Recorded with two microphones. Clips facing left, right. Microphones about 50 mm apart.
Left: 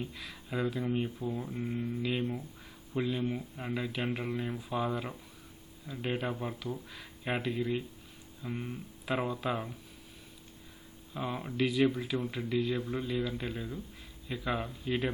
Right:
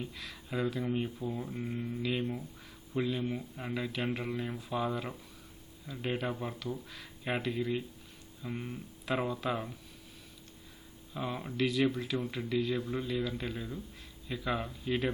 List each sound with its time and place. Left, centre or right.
0.0 s speech: centre
11.1 s speech: centre